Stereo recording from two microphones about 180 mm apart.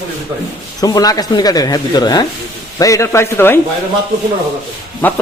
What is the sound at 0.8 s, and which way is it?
Speech, 20° left (ahead or behind).